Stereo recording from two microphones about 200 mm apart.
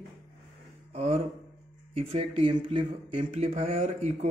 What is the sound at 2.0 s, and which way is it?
Speech, 30° right (ahead or behind).